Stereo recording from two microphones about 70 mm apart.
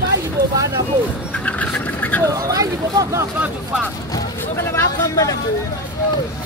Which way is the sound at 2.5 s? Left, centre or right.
Right.